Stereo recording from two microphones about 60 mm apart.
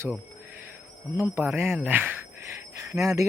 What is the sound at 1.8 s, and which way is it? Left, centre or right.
Jingle bell, right.